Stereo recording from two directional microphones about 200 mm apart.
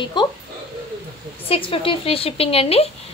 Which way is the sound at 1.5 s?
25° left (ahead or behind).